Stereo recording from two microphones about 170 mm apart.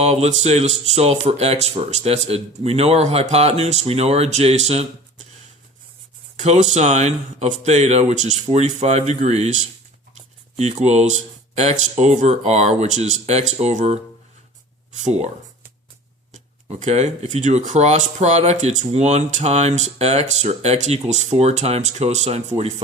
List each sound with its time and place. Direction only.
0.0 s speech: 40° right (ahead or behind)
6.3 s speech: 40° right (ahead or behind)
10.6 s speech: 40° right (ahead or behind)
15.0 s speech: 40° right (ahead or behind)
16.3 s speech: 40° right (ahead or behind)